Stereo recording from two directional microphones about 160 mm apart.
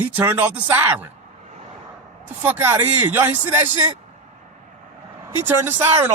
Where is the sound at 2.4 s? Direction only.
15° right (ahead or behind).